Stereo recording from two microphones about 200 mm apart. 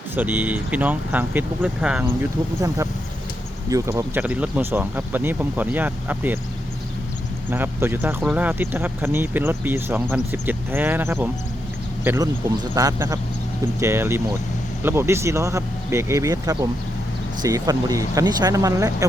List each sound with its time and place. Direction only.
0.2 s speech: 10° right (ahead or behind)
7.5 s speech: 10° right (ahead or behind)